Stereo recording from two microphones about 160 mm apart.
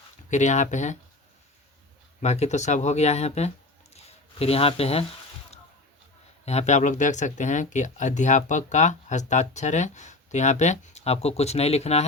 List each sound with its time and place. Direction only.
0.3 s speech: 50° left (ahead or behind)
2.2 s speech: 45° left (ahead or behind)
3.9 s a sound: 40° left (ahead or behind)
6.4 s speech: 45° left (ahead or behind)